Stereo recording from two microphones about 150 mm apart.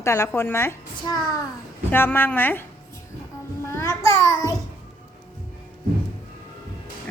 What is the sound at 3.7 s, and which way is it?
Speech, 20° left (ahead or behind).